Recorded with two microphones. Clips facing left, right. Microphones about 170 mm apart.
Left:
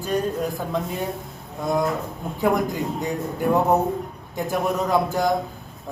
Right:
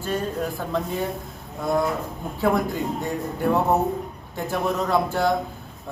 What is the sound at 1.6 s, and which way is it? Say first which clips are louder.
Speech: even; centre (ahead or behind).